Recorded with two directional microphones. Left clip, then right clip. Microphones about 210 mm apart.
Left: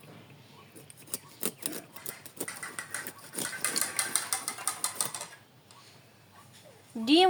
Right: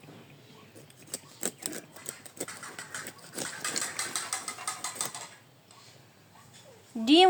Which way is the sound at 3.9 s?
55° left (ahead or behind).